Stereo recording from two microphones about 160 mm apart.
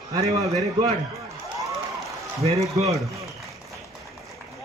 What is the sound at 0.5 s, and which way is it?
Speech, 20° right (ahead or behind).